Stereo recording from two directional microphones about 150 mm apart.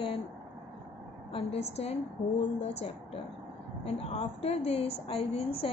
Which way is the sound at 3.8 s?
40° left (ahead or behind).